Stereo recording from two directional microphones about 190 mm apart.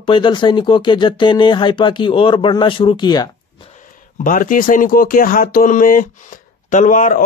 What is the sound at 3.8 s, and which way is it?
Speech, 45° left (ahead or behind).